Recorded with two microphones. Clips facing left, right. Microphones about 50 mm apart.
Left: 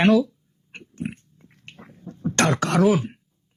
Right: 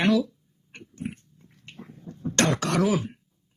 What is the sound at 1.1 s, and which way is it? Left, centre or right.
Pig, left.